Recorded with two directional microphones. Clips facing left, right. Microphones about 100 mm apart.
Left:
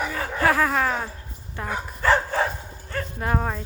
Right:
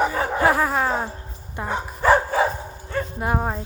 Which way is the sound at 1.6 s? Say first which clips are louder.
Right 3 dB; 20° right (ahead or behind).